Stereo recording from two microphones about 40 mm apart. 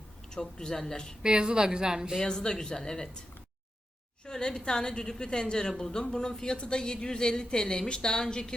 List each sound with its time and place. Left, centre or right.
0.3 s speech: centre
1.2 s a woman's voice: right
2.2 s speech: centre
4.3 s speech: centre